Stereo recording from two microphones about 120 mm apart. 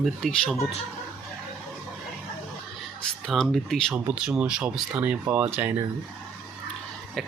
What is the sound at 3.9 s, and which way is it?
Speech, 10° right (ahead or behind).